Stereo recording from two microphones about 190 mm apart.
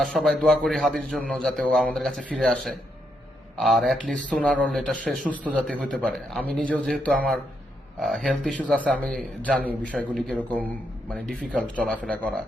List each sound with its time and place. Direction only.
0.0 s a man's voice: centre (ahead or behind)